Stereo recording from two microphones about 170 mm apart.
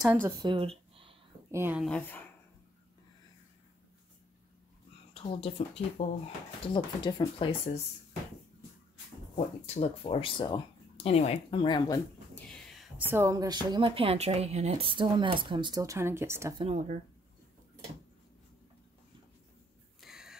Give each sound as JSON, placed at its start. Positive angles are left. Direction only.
{"t": 0.0, "sound": "speech", "side_deg": -10}
{"t": 0.4, "sound": "a sound", "side_deg": -30}
{"t": 1.5, "sound": "speech", "side_deg": -15}
{"t": 1.8, "sound": "speech", "side_deg": 5}
{"t": 5.1, "sound": "speech", "side_deg": 35}
{"t": 9.8, "sound": "speech", "side_deg": 30}
{"t": 12.4, "sound": "whispering", "side_deg": 5}
{"t": 13.1, "sound": "a woman's voice", "side_deg": -15}
{"t": 16.5, "sound": "speech", "side_deg": -40}
{"t": 20.0, "sound": "a sound", "side_deg": 0}